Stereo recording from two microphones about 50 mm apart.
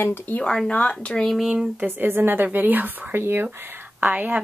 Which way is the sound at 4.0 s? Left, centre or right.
Right.